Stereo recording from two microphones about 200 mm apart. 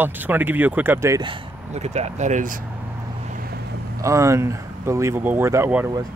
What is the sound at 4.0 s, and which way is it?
Speech, 15° right (ahead or behind).